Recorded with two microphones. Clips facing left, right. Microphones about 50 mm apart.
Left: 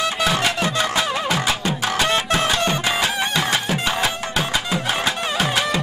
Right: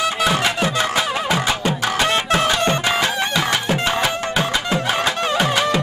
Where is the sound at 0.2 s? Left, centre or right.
Centre.